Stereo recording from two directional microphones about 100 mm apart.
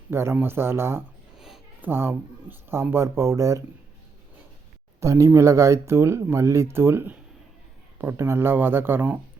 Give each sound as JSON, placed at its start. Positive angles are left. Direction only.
{"t": 0.1, "sound": "speech", "side_deg": -25}
{"t": 1.4, "sound": "a sound", "side_deg": -5}
{"t": 1.8, "sound": "speech", "side_deg": -25}
{"t": 4.9, "sound": "speech", "side_deg": -30}